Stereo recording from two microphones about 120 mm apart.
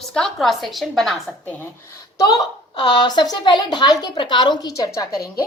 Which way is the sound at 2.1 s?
30° left (ahead or behind).